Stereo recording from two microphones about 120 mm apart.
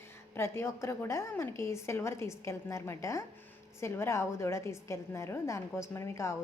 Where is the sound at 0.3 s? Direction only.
20° left (ahead or behind).